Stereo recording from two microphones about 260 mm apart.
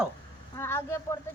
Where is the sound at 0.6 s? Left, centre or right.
Centre.